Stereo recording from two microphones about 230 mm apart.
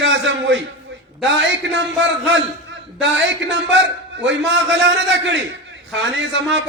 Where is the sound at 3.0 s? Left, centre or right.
Right.